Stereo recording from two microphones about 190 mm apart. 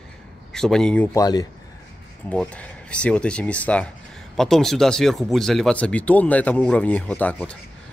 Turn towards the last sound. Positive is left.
turn(degrees=10)  # may be behind; listen again after turning